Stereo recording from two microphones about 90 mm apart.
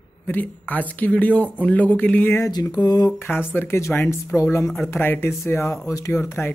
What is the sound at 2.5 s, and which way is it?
Speech, 50° left (ahead or behind).